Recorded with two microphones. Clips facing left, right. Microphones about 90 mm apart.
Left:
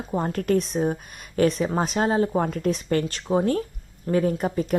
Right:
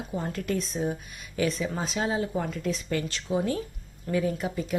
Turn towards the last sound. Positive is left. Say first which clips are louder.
# left 6 dB
turn(degrees=45)  # may be behind; listen again after turning